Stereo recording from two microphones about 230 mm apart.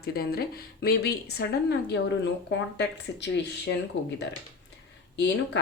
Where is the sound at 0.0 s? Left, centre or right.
Left.